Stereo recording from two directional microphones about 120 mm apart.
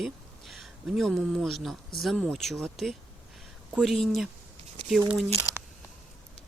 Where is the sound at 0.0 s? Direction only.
Centre (ahead or behind).